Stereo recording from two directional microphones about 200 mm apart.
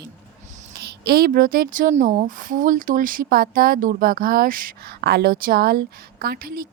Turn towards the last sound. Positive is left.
turn(degrees=-50)  # may be behind; listen again after turning